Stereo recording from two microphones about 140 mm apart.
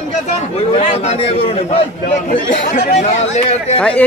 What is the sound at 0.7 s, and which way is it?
A man's voice, 50° left (ahead or behind).